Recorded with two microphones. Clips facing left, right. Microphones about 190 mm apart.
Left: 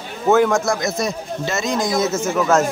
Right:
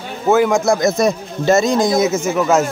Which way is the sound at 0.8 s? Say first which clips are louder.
Right 7 dB; 45° right (ahead or behind).